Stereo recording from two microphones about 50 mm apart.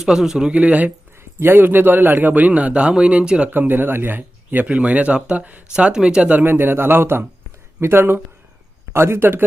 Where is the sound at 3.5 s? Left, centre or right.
Right.